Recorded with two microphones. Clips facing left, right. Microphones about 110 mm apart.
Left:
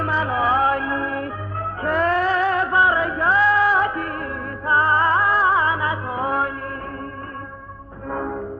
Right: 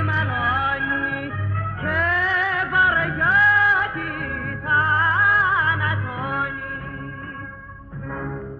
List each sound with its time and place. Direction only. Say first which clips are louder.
0.0 s music: left 4 dB; 35° left (ahead or behind)
8.1 s music: left 5 dB; 35° left (ahead or behind)